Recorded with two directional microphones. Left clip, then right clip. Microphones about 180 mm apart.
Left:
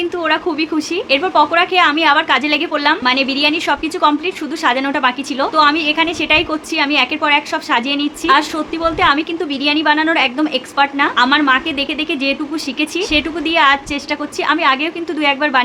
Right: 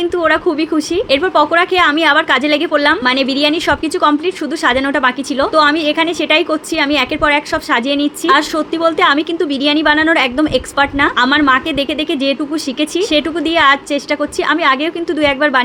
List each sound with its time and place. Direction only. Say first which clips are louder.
0.2 s a woman's voice: right 3 dB; 20° right (ahead or behind)